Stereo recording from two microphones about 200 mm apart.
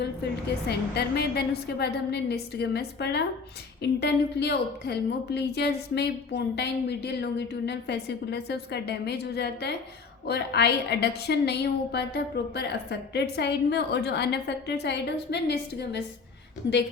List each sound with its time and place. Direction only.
0.7 s a woman's voice: 55° left (ahead or behind)